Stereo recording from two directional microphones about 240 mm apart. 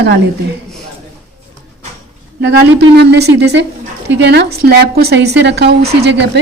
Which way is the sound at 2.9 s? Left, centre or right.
Right.